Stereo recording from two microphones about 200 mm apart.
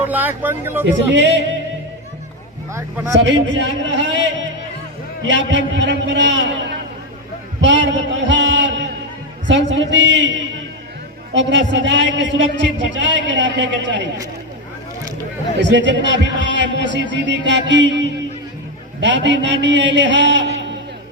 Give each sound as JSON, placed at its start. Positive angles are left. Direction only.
{"t": 0.0, "sound": "speech", "side_deg": -10}
{"t": 1.1, "sound": "a man's voice", "side_deg": -60}
{"t": 3.5, "sound": "a man's voice", "side_deg": -65}
{"t": 7.6, "sound": "a sound", "side_deg": -65}
{"t": 9.5, "sound": "a man's voice", "side_deg": -65}
{"t": 11.3, "sound": "a man's voice", "side_deg": -65}
{"t": 15.5, "sound": "a man's voice", "side_deg": -60}